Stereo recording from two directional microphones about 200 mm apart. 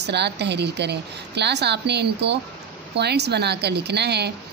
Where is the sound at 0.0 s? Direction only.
55° right (ahead or behind).